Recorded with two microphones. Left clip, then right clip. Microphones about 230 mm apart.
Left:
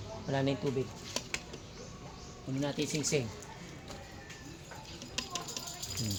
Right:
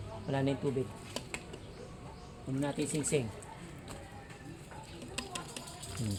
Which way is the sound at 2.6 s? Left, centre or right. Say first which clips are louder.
Left 1 dB; centre.